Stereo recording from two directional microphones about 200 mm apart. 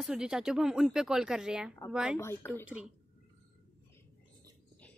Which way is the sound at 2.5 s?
5° right (ahead or behind).